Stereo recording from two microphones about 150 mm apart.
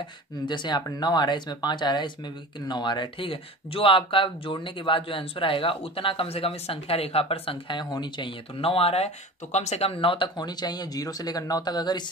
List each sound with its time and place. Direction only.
0.5 s speech: 30° left (ahead or behind)